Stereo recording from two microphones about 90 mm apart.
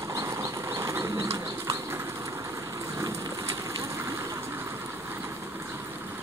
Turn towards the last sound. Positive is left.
turn(degrees=-30)  # may be behind; listen again after turning